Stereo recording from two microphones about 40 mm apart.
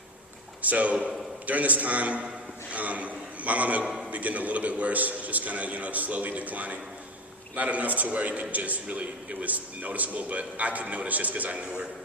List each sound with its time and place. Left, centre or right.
0.7 s a man's voice: right
11.6 s a man's voice: right